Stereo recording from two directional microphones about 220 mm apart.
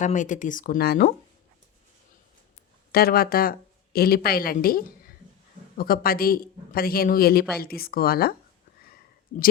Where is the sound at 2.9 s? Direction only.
45° left (ahead or behind).